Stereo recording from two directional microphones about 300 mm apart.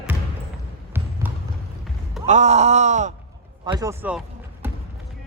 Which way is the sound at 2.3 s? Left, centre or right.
Right.